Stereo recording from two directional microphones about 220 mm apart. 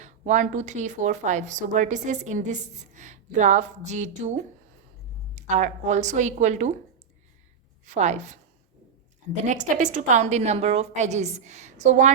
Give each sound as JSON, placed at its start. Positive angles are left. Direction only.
{"t": 0.0, "sound": "a woman's voice", "side_deg": -35}
{"t": 7.9, "sound": "a woman's voice", "side_deg": -30}